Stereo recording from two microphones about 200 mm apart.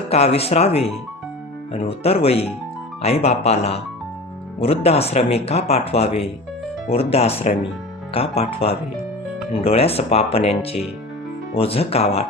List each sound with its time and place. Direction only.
0.1 s speech: 30° left (ahead or behind)